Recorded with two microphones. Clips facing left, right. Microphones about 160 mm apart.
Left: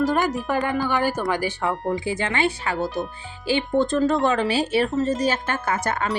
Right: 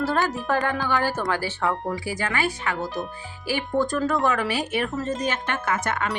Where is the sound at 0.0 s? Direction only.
15° left (ahead or behind).